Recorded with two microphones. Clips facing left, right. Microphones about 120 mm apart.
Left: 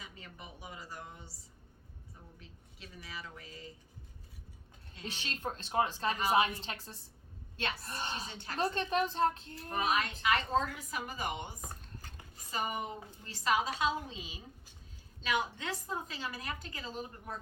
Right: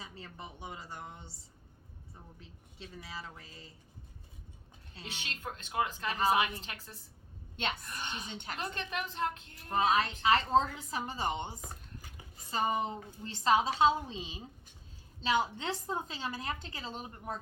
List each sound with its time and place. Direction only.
0.0 s a woman's voice: 30° right (ahead or behind)
2.7 s a woman's voice: 30° right (ahead or behind)
5.0 s speech: 35° left (ahead or behind)
9.6 s a woman's voice: 25° right (ahead or behind)